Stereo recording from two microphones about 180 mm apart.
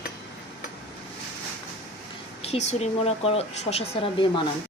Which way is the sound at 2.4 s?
35° left (ahead or behind).